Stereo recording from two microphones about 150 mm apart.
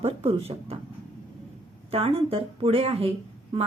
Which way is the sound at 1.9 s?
40° right (ahead or behind).